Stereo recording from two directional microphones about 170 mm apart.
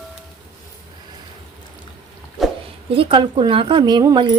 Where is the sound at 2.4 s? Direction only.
Centre (ahead or behind).